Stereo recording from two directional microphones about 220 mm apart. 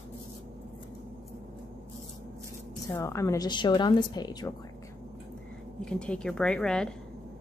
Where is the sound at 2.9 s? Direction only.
15° left (ahead or behind).